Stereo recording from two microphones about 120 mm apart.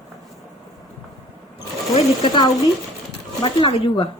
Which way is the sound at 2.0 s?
40° left (ahead or behind).